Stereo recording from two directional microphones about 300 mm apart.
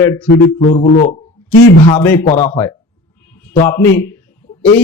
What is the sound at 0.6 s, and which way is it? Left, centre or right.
Speech, left.